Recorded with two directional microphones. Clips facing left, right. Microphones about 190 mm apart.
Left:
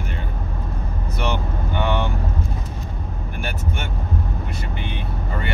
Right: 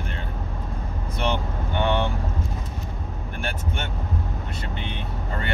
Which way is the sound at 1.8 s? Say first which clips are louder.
Even; 25° right (ahead or behind).